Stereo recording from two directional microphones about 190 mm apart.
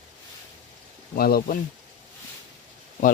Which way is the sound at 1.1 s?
50° left (ahead or behind).